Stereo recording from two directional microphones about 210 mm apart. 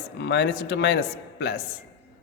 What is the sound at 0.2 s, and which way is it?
Speech, 55° left (ahead or behind).